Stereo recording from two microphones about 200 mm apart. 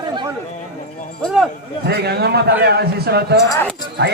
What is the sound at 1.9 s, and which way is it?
A man's voice, 55° right (ahead or behind).